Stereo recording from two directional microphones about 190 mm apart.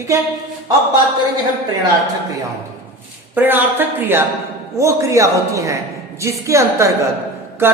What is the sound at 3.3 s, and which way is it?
A woman's voice, 10° right (ahead or behind).